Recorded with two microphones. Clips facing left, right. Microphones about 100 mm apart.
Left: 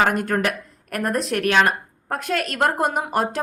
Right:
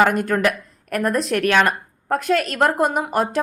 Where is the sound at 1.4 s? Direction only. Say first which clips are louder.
Even; 40° right (ahead or behind).